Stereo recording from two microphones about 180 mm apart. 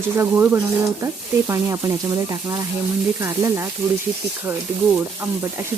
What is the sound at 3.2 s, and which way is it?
Speech, 15° right (ahead or behind).